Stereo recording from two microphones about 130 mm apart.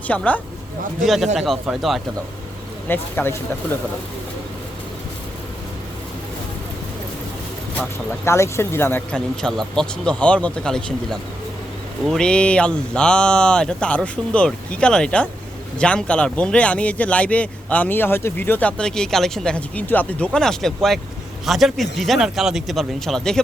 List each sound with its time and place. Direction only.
0.1 s speech: 10° left (ahead or behind)
1.0 s speech: centre (ahead or behind)
2.9 s speech: 15° left (ahead or behind)
8.2 s speech: 20° left (ahead or behind)
9.1 s speech: 5° left (ahead or behind)